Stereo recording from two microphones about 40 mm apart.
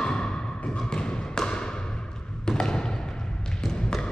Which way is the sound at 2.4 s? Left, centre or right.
Centre.